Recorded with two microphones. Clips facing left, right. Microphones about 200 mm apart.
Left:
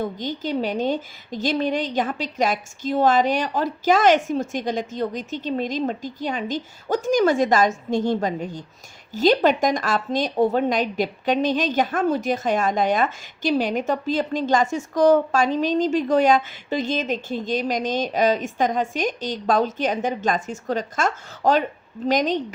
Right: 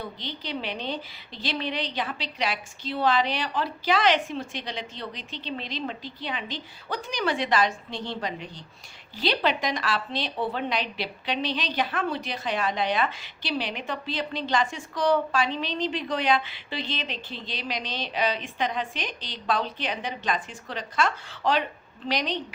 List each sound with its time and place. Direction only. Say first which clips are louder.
0.0 s speech: left 10 dB; 45° left (ahead or behind)